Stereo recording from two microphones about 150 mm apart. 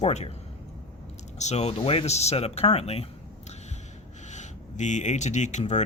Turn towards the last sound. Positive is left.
turn(degrees=50)  # may be behind; listen again after turning